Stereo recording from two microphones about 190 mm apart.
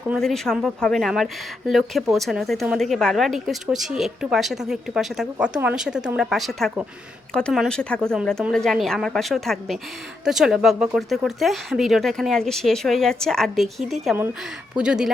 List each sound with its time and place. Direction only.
0.1 s speech: centre (ahead or behind)